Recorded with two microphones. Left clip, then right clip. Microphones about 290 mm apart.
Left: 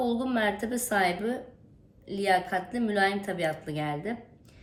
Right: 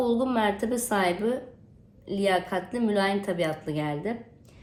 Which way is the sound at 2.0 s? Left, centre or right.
Centre.